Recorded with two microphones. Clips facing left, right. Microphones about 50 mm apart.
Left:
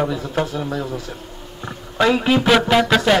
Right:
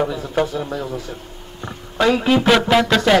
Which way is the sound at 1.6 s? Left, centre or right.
Centre.